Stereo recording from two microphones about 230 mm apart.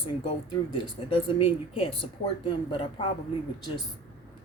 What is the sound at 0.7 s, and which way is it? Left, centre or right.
Speech, left.